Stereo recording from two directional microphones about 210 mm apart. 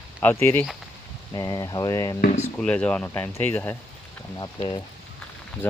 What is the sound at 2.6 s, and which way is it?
Speech, 5° left (ahead or behind).